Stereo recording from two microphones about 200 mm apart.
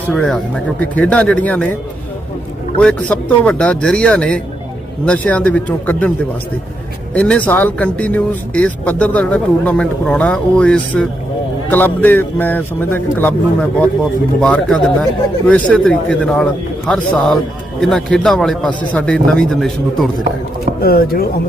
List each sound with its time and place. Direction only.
0.1 s a man's voice: 5° left (ahead or behind)
2.8 s a man's voice: 5° left (ahead or behind)
7.1 s a man's voice: 5° left (ahead or behind)
20.8 s speech: 50° left (ahead or behind)